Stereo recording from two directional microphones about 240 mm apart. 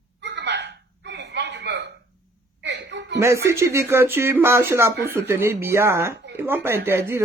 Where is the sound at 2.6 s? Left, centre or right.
Right.